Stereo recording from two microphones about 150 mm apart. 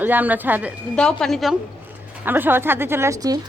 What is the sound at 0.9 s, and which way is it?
Speech, 5° left (ahead or behind).